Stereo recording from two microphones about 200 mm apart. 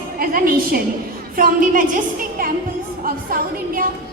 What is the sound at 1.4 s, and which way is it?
A woman's voice, 45° right (ahead or behind).